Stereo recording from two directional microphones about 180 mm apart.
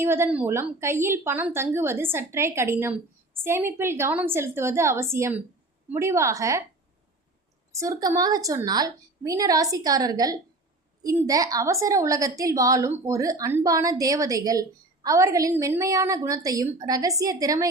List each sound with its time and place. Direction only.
0.0 s a woman's voice: 15° right (ahead or behind)
7.7 s a woman's voice: 15° right (ahead or behind)